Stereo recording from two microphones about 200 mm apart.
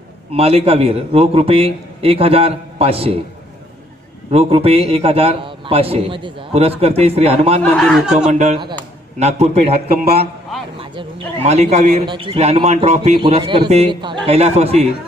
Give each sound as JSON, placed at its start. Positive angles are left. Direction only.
{"t": 0.3, "sound": "a man's voice", "side_deg": -30}
{"t": 4.3, "sound": "a man's voice", "side_deg": -30}
{"t": 7.7, "sound": "a man's voice", "side_deg": 5}
{"t": 8.3, "sound": "a man's voice", "side_deg": -35}
{"t": 10.8, "sound": "a man's voice", "side_deg": -30}